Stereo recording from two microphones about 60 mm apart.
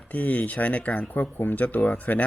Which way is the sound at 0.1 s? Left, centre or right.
Left.